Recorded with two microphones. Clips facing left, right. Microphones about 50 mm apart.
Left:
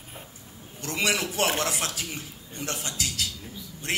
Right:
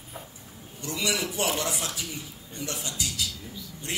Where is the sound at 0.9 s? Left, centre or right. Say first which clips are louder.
Left 3 dB; left.